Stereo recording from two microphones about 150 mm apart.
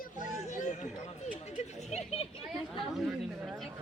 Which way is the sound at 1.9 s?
40° left (ahead or behind).